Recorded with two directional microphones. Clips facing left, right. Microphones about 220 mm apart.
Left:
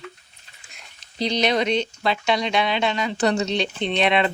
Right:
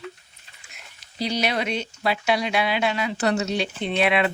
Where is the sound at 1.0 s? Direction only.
10° right (ahead or behind).